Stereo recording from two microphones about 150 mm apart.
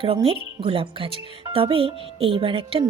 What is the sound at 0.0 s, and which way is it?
A woman's voice, 40° right (ahead or behind).